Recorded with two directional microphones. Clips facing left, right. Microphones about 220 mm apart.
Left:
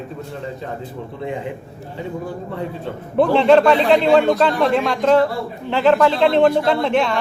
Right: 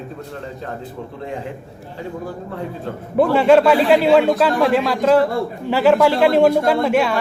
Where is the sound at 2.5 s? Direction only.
5° right (ahead or behind).